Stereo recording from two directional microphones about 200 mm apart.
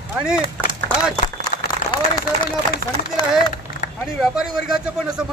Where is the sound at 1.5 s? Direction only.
45° left (ahead or behind).